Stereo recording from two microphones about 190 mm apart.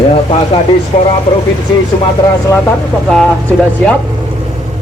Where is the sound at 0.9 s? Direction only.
35° left (ahead or behind).